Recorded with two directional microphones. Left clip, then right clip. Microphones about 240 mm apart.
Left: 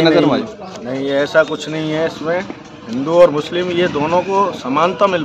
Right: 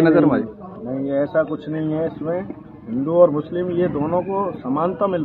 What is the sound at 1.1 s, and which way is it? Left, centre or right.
Speech, left.